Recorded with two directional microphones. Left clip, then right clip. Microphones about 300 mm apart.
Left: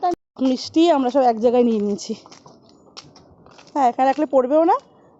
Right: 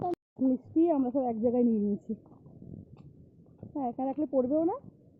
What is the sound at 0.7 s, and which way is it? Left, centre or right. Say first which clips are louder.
Speech: left 11 dB; centre.